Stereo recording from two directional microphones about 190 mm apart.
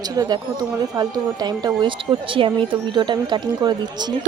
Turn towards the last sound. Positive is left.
turn(degrees=-25)  # may be behind; listen again after turning